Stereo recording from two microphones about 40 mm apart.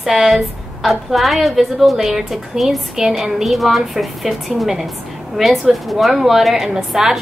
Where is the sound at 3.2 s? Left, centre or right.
Centre.